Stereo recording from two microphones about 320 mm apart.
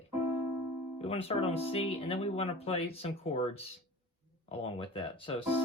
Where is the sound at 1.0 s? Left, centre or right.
Centre.